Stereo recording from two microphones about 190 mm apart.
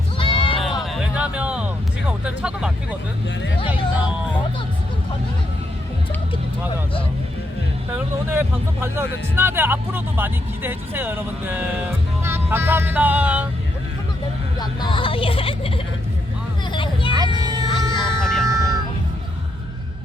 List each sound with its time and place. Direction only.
0.2 s sheep: 25° left (ahead or behind)
0.8 s music: 5° right (ahead or behind)
3.7 s speech: 10° right (ahead or behind)
7.9 s speech: 10° right (ahead or behind)
12.2 s music: 10° right (ahead or behind)
14.6 s speech: 25° left (ahead or behind)
16.7 s a sound: 25° left (ahead or behind)
17.4 s music: 20° right (ahead or behind)
17.7 s music: 25° left (ahead or behind)
18.2 s a sound: centre (ahead or behind)